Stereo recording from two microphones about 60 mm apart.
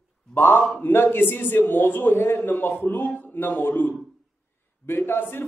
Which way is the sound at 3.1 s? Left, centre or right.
Left.